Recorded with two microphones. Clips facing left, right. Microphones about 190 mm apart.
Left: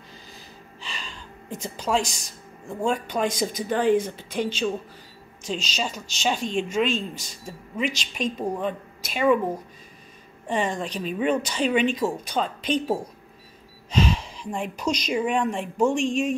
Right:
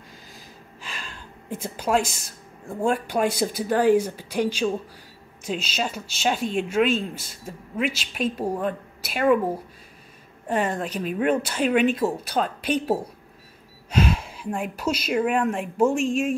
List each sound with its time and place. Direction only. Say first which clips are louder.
0.7 s gasp: even; 5° right (ahead or behind)
1.6 s a woman's voice: right 2 dB; 5° right (ahead or behind)